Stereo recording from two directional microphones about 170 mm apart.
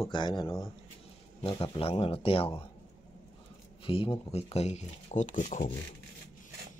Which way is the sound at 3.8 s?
30° left (ahead or behind).